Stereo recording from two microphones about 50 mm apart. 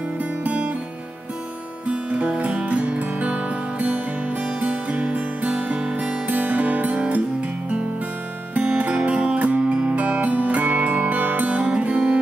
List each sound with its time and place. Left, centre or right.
0.2 s music: right
1.9 s music: right
8.5 s music: right